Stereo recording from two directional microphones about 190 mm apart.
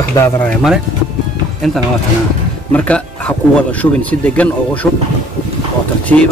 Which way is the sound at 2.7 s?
5° left (ahead or behind).